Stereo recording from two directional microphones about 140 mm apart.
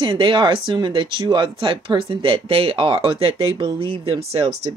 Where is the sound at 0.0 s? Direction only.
35° right (ahead or behind).